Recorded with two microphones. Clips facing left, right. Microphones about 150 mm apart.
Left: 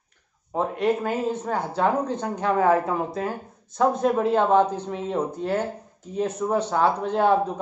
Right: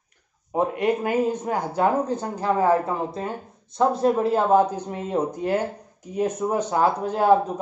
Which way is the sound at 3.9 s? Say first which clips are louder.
Right 1 dB; 30° right (ahead or behind).